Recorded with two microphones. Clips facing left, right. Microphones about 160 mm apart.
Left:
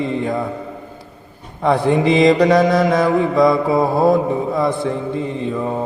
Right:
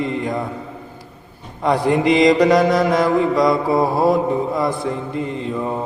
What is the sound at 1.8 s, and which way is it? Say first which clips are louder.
Mantra: even; 25° left (ahead or behind).